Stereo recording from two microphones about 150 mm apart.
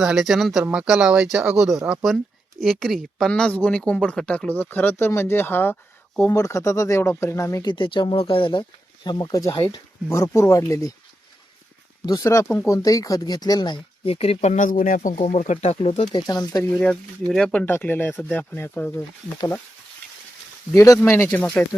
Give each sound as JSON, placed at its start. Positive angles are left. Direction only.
{"t": 0.0, "sound": "speech", "side_deg": -5}
{"t": 12.0, "sound": "speech", "side_deg": 20}
{"t": 15.2, "sound": "speech", "side_deg": 50}
{"t": 16.1, "sound": "speech", "side_deg": 25}
{"t": 16.8, "sound": "speech", "side_deg": 5}
{"t": 20.7, "sound": "speech", "side_deg": 20}